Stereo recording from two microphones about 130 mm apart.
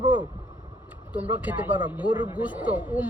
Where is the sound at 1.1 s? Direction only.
15° right (ahead or behind).